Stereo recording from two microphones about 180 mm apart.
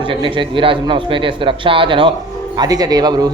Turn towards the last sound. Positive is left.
turn(degrees=-20)  # may be behind; listen again after turning